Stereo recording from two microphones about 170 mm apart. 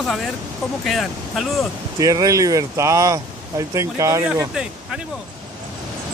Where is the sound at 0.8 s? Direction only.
Centre (ahead or behind).